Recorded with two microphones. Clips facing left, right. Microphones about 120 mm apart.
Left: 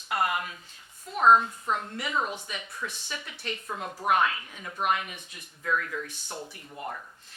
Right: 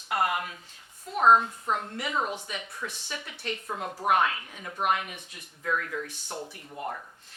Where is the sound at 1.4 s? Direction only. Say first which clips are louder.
Even; 35° right (ahead or behind).